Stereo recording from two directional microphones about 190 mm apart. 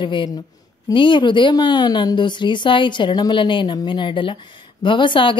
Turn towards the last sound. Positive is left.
turn(degrees=25)  # may be behind; listen again after turning